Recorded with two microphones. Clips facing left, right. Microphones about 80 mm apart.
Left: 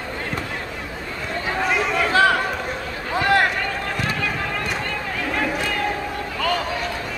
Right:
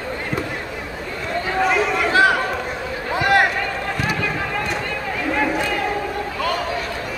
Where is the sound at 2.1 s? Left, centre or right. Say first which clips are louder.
Right 1 dB; centre.